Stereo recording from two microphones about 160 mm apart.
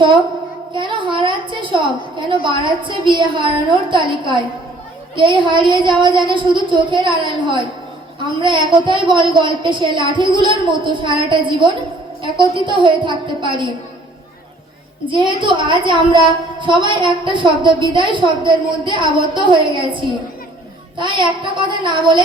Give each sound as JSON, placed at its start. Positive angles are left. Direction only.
{"t": 0.7, "sound": "a woman's voice", "side_deg": -30}
{"t": 15.0, "sound": "a woman's voice", "side_deg": -30}